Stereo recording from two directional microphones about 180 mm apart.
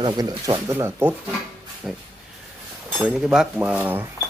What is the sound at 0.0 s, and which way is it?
Speech, 25° right (ahead or behind).